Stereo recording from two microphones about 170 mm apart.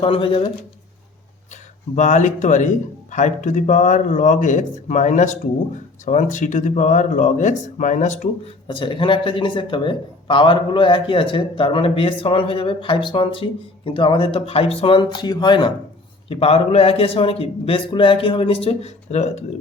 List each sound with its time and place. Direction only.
0.0 s a man's voice: 30° left (ahead or behind)
2.0 s speech: 45° left (ahead or behind)
8.6 s a man's voice: 30° left (ahead or behind)